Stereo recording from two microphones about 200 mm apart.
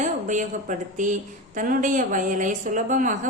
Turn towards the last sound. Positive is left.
turn(degrees=-40)  # may be behind; listen again after turning